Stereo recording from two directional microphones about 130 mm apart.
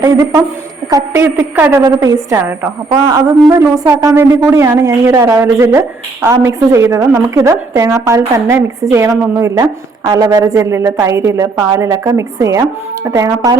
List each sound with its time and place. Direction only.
0.0 s a woman's voice: 30° right (ahead or behind)
1.8 s a woman's voice: 30° right (ahead or behind)